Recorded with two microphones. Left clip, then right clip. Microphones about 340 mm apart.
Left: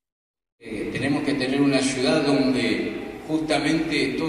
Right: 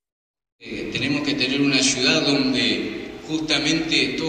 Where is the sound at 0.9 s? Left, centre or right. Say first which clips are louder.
Right 1 dB; left.